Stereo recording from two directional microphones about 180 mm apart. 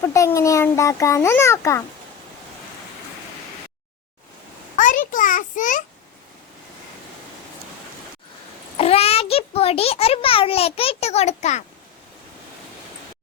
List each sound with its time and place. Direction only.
0.0 s a child's voice: 15° left (ahead or behind)
4.8 s a sound: 45° left (ahead or behind)
8.8 s a child's voice: 35° left (ahead or behind)